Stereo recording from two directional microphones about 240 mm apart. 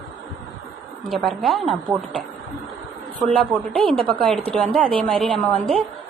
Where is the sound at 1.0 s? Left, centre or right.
Centre.